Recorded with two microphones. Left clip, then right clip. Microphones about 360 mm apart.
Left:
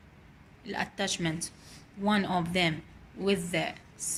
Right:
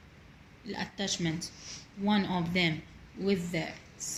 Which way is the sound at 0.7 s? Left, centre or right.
Left.